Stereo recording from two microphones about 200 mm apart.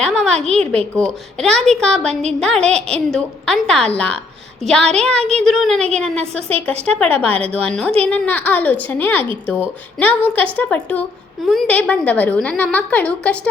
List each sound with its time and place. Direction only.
0.0 s a sound: 5° left (ahead or behind)
0.4 s a woman's voice: 5° left (ahead or behind)
7.3 s a woman's voice: 30° right (ahead or behind)
8.0 s a woman's voice: 5° left (ahead or behind)